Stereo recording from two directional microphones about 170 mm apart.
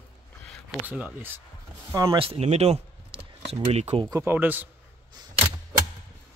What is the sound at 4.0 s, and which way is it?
Speech, 15° right (ahead or behind).